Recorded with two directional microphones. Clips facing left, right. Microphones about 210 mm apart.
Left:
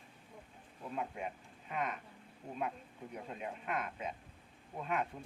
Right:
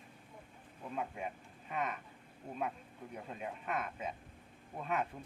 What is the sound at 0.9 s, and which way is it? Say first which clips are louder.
Speech: even; centre (ahead or behind).